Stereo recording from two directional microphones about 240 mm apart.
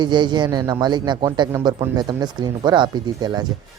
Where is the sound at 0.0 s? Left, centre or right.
Centre.